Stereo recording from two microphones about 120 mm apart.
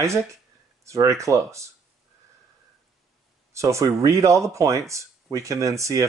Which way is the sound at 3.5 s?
25° right (ahead or behind).